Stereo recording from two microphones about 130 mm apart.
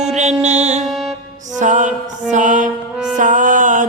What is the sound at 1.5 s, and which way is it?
Mantra, 70° right (ahead or behind).